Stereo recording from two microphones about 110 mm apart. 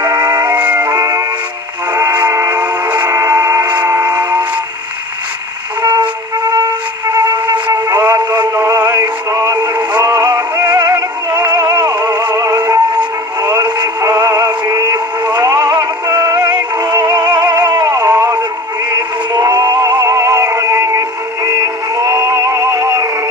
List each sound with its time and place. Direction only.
0.0 s music: 20° right (ahead or behind)
0.8 s music: 30° right (ahead or behind)
2.5 s music: 10° right (ahead or behind)
3.1 s a sound: 30° right (ahead or behind)
3.6 s train: 15° right (ahead or behind)
5.8 s train: 40° right (ahead or behind)
6.5 s music: 35° right (ahead or behind)
8.4 s synthetic singing: 30° right (ahead or behind)
11.3 s music: 35° right (ahead or behind)
12.3 s synthetic singing: 35° right (ahead or behind)
15.3 s music: 35° right (ahead or behind)
21.5 s synthetic singing: 35° right (ahead or behind)